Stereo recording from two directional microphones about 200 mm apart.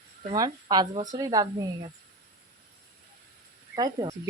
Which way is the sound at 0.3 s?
20° right (ahead or behind).